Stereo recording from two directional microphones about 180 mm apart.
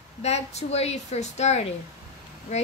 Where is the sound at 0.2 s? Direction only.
35° left (ahead or behind).